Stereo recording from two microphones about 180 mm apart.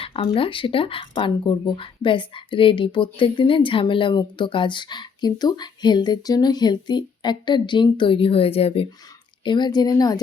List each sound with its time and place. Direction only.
0.0 s speech: 30° left (ahead or behind)